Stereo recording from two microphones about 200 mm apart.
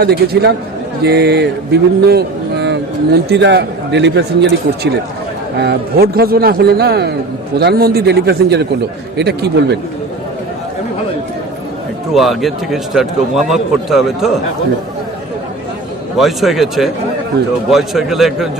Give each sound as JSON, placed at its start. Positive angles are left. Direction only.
{"t": 0.0, "sound": "a man's voice", "side_deg": -55}
{"t": 12.1, "sound": "a man's voice", "side_deg": 0}
{"t": 16.1, "sound": "a man's voice", "side_deg": 0}